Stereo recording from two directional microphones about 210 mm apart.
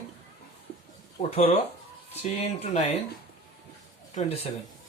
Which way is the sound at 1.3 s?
30° left (ahead or behind).